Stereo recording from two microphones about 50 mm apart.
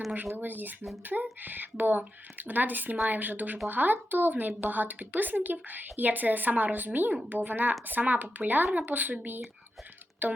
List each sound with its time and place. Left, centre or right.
0.3 s a woman's voice: right